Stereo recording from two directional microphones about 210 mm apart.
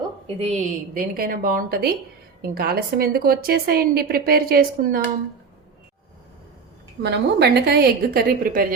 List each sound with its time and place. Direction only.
0.3 s a woman's voice: 35° right (ahead or behind)
7.0 s a woman's voice: 50° right (ahead or behind)